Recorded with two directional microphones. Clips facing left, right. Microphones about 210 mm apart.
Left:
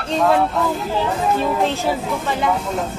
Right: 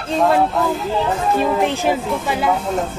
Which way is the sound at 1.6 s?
15° right (ahead or behind).